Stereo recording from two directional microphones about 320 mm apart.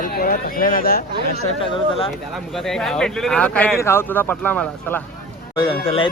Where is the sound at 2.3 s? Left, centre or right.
Centre.